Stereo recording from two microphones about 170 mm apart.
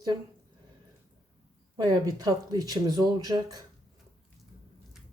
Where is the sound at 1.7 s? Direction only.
25° right (ahead or behind).